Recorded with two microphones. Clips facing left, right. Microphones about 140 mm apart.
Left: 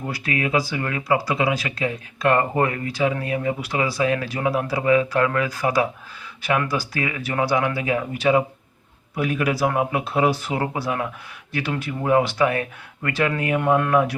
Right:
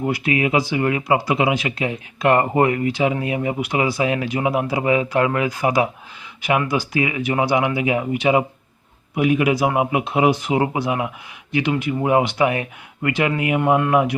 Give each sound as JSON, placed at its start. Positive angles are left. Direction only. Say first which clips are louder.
{"t": 0.0, "sound": "speech", "louder": "right 6 dB", "side_deg": -20}